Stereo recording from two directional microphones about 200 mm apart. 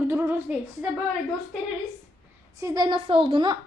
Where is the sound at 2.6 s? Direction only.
20° right (ahead or behind).